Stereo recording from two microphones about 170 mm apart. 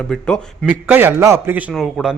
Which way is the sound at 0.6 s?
10° right (ahead or behind).